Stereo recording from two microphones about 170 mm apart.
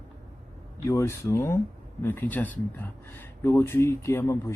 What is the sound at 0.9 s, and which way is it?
Speech, 15° left (ahead or behind).